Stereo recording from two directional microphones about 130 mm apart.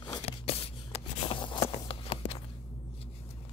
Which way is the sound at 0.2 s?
50° left (ahead or behind).